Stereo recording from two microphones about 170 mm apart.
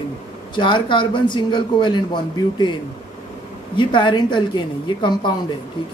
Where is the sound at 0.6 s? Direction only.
30° left (ahead or behind).